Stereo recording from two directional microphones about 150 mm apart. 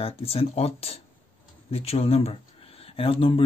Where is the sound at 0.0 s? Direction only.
40° left (ahead or behind).